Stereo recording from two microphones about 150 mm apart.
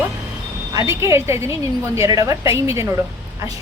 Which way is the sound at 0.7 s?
20° right (ahead or behind).